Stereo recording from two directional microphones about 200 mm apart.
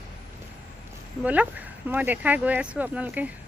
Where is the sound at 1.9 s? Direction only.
10° right (ahead or behind).